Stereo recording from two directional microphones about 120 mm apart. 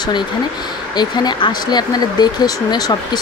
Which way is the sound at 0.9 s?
35° left (ahead or behind).